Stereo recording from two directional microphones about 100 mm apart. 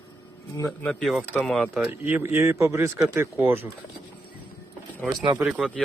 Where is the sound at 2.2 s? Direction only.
25° right (ahead or behind).